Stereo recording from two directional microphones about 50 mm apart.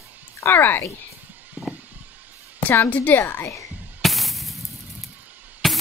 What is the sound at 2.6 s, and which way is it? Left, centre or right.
Speech, left.